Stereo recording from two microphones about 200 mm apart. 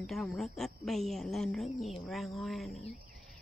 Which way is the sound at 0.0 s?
Centre (ahead or behind).